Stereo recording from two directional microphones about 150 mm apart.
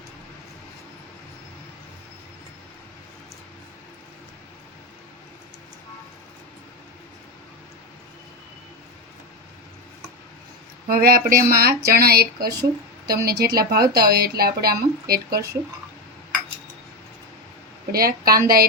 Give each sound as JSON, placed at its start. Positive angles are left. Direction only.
{"t": 10.8, "sound": "speech", "side_deg": -85}
{"t": 17.9, "sound": "a woman's voice", "side_deg": -80}